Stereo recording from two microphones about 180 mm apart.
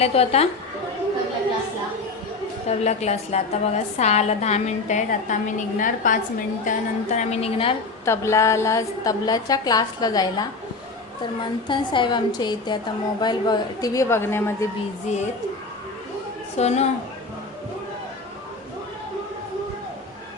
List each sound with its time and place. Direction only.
0.0 s a woman's voice: 35° left (ahead or behind)
2.6 s a woman's voice: 35° left (ahead or behind)
8.0 s a woman's voice: 15° left (ahead or behind)
11.7 s a woman's voice: 25° left (ahead or behind)
15.1 s a woman's voice: 40° left (ahead or behind)
16.6 s a woman's voice: 35° left (ahead or behind)